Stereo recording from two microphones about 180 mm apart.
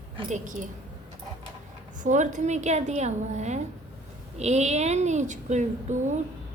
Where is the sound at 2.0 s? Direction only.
45° right (ahead or behind).